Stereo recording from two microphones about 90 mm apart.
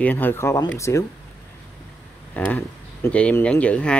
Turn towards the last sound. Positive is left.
turn(degrees=15)  # may be behind; listen again after turning